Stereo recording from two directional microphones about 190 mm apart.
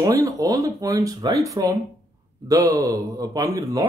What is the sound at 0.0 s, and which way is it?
Speech, 15° right (ahead or behind).